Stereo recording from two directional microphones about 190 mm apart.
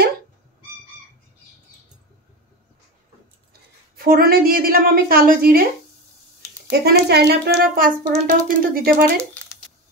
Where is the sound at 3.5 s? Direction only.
50° right (ahead or behind).